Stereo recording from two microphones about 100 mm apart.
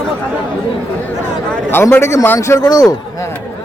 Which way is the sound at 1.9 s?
30° left (ahead or behind).